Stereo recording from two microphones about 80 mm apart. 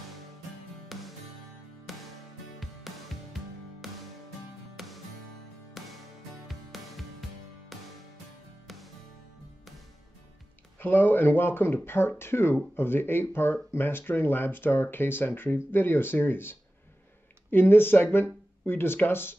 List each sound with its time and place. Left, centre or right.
0.9 s music: centre
10.8 s speech: left